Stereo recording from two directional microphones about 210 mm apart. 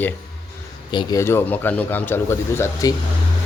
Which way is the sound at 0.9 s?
20° left (ahead or behind).